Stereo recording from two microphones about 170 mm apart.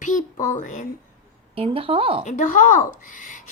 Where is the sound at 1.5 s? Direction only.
35° right (ahead or behind).